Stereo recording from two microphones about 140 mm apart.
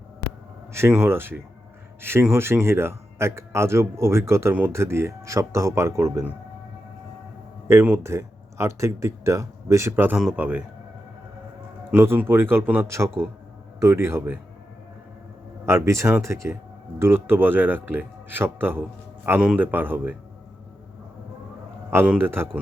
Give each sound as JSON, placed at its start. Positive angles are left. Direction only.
{"t": 0.7, "sound": "a man's voice", "side_deg": -15}
{"t": 7.7, "sound": "speech", "side_deg": -20}
{"t": 11.9, "sound": "a man's voice", "side_deg": -15}
{"t": 15.6, "sound": "a man's voice", "side_deg": -20}
{"t": 21.8, "sound": "a man's voice", "side_deg": -10}